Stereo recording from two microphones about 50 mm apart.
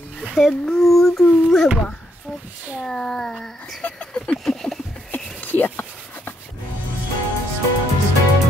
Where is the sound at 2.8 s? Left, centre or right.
Centre.